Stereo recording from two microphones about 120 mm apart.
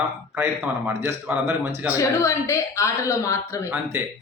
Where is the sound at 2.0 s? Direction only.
25° left (ahead or behind).